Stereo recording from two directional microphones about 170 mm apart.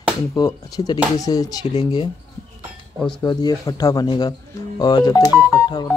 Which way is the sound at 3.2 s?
25° left (ahead or behind).